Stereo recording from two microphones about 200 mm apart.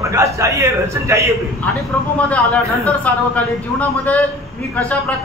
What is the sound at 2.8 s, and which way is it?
Speech, 5° left (ahead or behind).